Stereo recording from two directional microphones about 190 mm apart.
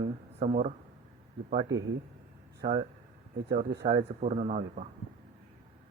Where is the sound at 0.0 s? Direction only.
35° right (ahead or behind).